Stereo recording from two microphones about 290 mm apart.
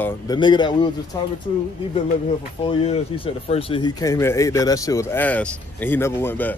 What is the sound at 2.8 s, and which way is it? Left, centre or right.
Speech, centre.